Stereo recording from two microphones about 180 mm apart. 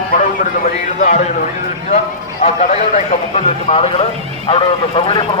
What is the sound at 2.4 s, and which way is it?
A man's voice, 45° left (ahead or behind).